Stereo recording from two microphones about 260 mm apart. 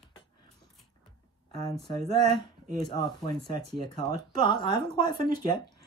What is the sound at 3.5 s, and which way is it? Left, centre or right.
Speech, centre.